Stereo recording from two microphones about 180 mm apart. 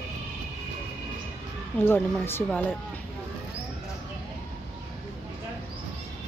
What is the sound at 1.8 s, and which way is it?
Speech, 10° left (ahead or behind).